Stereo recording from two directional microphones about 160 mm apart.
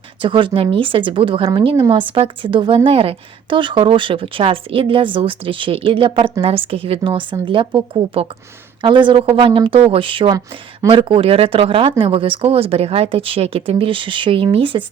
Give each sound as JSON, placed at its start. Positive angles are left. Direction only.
{"t": 0.2, "sound": "speech", "side_deg": -30}